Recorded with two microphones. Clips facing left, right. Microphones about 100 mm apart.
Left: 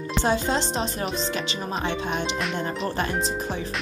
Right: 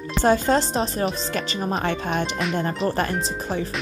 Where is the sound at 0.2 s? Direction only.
45° right (ahead or behind).